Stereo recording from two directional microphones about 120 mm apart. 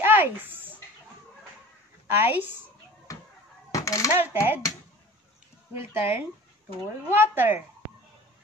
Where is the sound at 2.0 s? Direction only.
15° right (ahead or behind).